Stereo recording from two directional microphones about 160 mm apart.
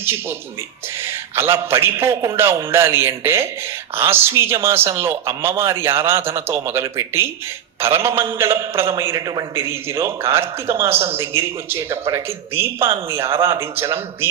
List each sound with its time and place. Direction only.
1.0 s a man's voice: 15° right (ahead or behind)